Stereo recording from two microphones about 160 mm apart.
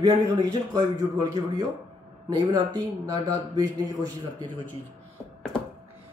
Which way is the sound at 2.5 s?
25° right (ahead or behind).